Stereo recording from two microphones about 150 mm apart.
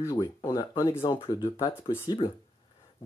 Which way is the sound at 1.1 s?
30° left (ahead or behind).